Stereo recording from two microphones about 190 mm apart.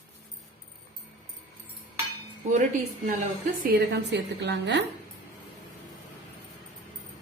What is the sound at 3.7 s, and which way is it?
A woman's voice, 60° right (ahead or behind).